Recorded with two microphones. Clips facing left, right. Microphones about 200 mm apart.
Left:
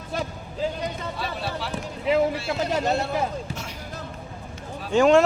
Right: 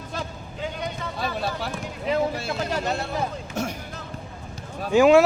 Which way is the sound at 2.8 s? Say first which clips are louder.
Left 3 dB; 40° left (ahead or behind).